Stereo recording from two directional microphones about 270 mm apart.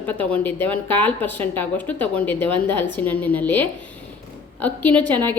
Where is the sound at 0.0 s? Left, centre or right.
Centre.